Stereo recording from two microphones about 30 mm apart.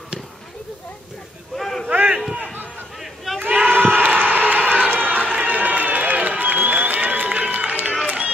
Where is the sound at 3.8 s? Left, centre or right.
Right.